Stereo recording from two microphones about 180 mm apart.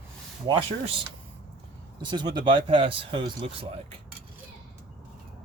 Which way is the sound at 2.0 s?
25° right (ahead or behind).